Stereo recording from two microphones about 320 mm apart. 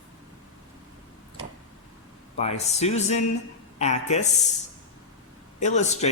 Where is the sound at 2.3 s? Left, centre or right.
Centre.